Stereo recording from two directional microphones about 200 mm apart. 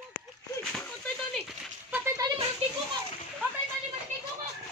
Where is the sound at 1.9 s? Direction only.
15° right (ahead or behind).